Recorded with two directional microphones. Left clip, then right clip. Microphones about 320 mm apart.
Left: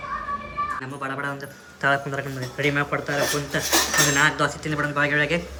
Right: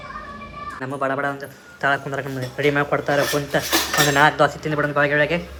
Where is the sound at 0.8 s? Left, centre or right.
Centre.